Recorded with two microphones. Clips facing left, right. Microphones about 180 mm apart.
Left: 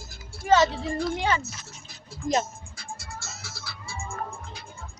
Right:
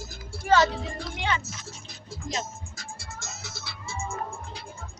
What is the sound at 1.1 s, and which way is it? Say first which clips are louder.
Speech: right 1 dB; 40° left (ahead or behind).